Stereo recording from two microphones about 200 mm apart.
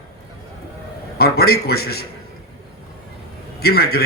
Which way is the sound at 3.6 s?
50° left (ahead or behind).